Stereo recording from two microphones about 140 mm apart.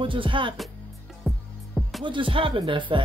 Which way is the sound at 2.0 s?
35° right (ahead or behind).